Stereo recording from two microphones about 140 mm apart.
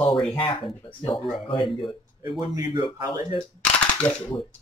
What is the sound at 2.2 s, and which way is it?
Speech, 30° right (ahead or behind).